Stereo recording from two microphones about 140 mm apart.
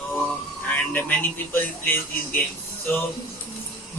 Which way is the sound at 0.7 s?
10° left (ahead or behind).